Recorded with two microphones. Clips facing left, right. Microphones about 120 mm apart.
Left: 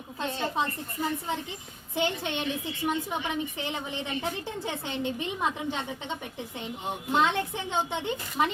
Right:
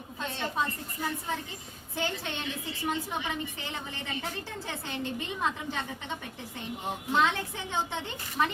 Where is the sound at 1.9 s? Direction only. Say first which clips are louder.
Left 5 dB; 20° left (ahead or behind).